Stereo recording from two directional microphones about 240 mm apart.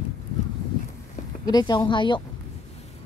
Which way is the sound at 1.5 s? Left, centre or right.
Centre.